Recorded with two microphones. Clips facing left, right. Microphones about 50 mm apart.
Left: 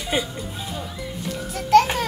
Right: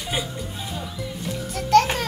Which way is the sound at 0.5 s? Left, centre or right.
Centre.